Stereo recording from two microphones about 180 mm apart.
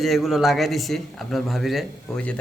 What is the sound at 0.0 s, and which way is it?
Speech, centre (ahead or behind).